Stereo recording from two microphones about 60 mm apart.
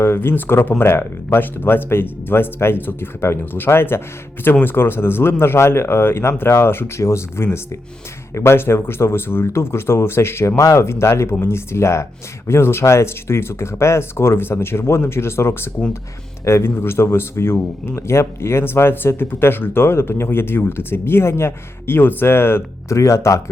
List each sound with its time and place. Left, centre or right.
0.0 s speech: left
23.0 s speech: left